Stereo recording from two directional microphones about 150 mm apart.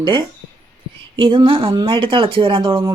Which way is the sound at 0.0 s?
30° right (ahead or behind).